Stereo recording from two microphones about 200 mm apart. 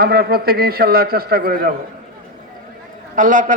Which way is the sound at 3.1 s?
40° right (ahead or behind).